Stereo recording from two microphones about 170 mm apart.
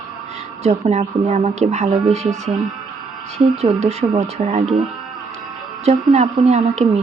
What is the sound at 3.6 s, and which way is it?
Speech, 40° right (ahead or behind).